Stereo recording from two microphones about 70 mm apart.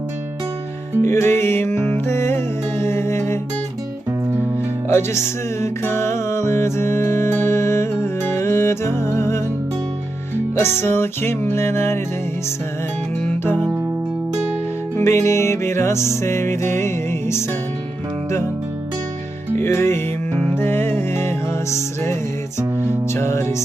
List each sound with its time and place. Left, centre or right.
1.0 s music: left
4.9 s music: left
10.5 s music: left
14.9 s music: left
19.5 s music: left